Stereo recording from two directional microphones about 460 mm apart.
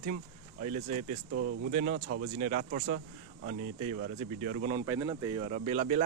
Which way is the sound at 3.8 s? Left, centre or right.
Right.